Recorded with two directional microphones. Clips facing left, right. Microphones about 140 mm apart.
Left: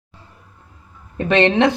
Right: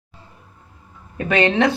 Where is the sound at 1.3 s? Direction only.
25° left (ahead or behind).